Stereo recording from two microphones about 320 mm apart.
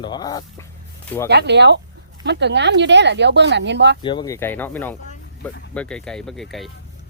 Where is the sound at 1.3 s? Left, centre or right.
Right.